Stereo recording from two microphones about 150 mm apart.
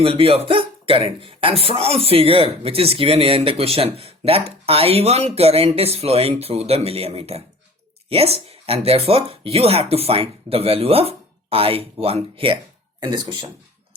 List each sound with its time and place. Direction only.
0.0 s speech: 35° right (ahead or behind)